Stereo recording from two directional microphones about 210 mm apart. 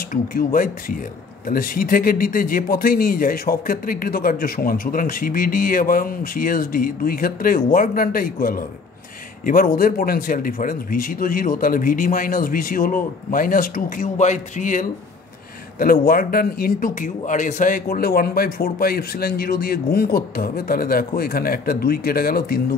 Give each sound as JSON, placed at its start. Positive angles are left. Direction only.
{"t": 0.1, "sound": "a man's voice", "side_deg": 45}